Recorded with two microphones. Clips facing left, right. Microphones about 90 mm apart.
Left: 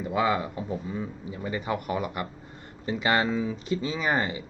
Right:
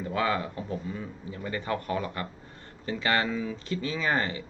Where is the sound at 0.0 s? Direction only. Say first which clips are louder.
Left 3 dB; 15° left (ahead or behind).